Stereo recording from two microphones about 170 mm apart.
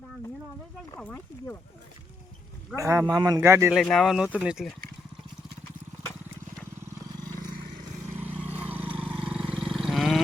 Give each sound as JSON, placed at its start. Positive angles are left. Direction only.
{"t": 0.9, "sound": "speech", "side_deg": 10}
{"t": 2.7, "sound": "a man's voice", "side_deg": -20}
{"t": 3.8, "sound": "speech", "side_deg": 0}
{"t": 8.4, "sound": "vehicle", "side_deg": -10}
{"t": 9.7, "sound": "wild animals", "side_deg": 0}